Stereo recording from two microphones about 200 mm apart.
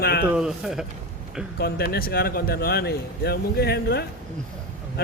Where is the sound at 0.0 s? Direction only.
50° left (ahead or behind).